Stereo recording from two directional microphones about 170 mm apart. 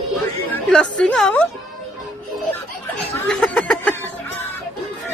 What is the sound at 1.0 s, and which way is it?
Speech, 5° left (ahead or behind).